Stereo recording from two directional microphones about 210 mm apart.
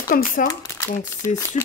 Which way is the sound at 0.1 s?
40° left (ahead or behind).